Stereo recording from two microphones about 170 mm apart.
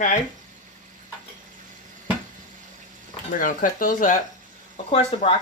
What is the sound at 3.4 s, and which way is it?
Speech, 50° left (ahead or behind).